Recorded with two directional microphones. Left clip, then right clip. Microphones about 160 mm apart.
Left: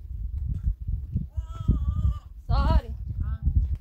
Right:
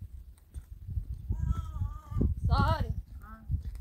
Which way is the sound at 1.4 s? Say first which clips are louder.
Left 8 dB; 90° left.